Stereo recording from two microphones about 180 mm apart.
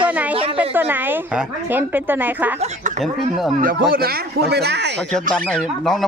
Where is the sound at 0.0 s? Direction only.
10° right (ahead or behind).